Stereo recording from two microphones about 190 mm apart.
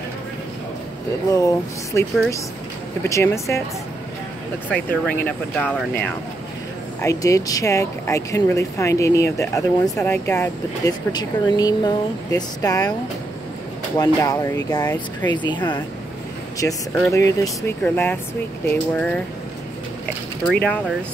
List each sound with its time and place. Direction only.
1.3 s speech: 15° left (ahead or behind)
4.6 s speech: 10° left (ahead or behind)
13.9 s speech: 20° left (ahead or behind)